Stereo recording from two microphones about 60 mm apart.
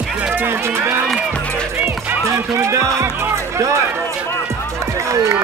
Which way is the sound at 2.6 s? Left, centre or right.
Right.